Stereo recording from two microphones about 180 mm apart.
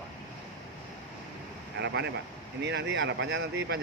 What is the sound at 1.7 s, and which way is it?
A man's voice, 75° right (ahead or behind).